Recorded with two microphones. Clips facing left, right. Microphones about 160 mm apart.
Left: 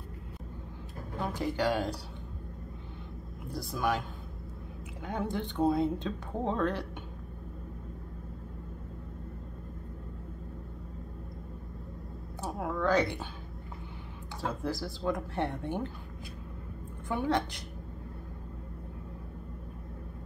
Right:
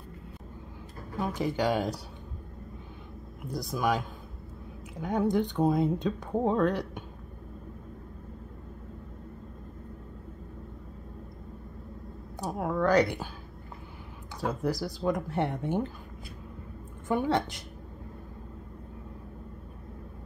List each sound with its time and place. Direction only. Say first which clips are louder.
1.2 s speech: right 2 dB; 15° right (ahead or behind)
3.5 s speech: right 3 dB; 15° right (ahead or behind)
5.0 s speech: right 7 dB; 15° right (ahead or behind)
12.4 s speech: right 4 dB; 15° right (ahead or behind)
14.4 s speech: right 4 dB; 20° right (ahead or behind)
17.1 s speech: right 3 dB; 15° right (ahead or behind)